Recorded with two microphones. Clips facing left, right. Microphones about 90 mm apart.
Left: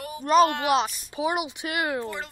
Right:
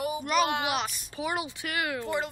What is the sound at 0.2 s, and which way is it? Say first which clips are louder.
Speech: left 9 dB; 35° left (ahead or behind).